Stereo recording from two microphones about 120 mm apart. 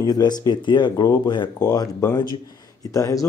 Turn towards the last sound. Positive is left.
turn(degrees=30)  # may be behind; listen again after turning